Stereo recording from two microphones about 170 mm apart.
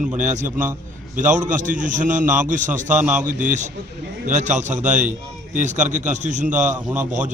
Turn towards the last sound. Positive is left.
turn(degrees=-45)  # may be behind; listen again after turning